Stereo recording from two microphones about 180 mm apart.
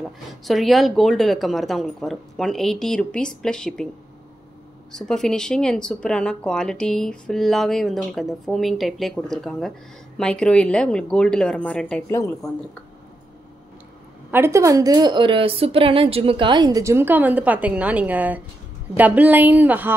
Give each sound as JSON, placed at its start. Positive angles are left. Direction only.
{"t": 0.0, "sound": "speech", "side_deg": 0}
{"t": 4.9, "sound": "speech", "side_deg": 5}
{"t": 14.3, "sound": "a woman's voice", "side_deg": -15}